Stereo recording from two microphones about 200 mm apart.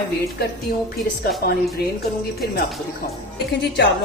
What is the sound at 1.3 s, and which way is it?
Speech, 50° left (ahead or behind).